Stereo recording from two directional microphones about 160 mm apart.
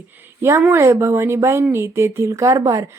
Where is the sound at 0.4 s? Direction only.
15° right (ahead or behind).